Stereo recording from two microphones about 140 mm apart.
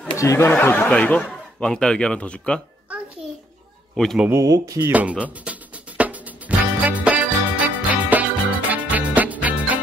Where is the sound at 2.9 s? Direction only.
10° right (ahead or behind).